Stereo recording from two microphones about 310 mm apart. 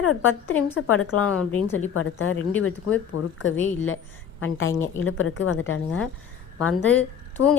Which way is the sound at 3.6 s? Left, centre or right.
Left.